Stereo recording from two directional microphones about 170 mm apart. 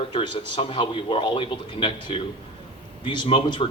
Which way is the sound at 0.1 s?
30° left (ahead or behind).